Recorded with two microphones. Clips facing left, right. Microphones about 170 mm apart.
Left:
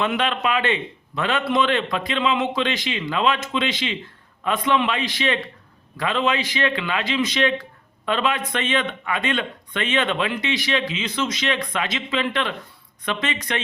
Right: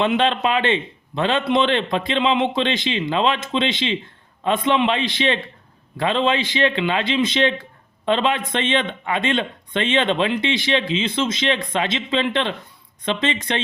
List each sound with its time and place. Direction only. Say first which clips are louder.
0.0 s a man's voice: right 4 dB; 25° right (ahead or behind)